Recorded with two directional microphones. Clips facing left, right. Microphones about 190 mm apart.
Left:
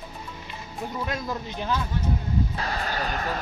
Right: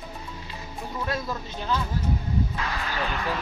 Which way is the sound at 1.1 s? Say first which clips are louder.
Even; 15° left (ahead or behind).